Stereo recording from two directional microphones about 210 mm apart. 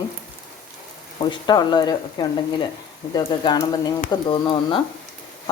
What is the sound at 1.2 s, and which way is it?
Speech, 20° left (ahead or behind).